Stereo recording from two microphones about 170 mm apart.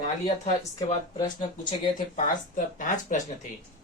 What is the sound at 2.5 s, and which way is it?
Speech, 50° left (ahead or behind).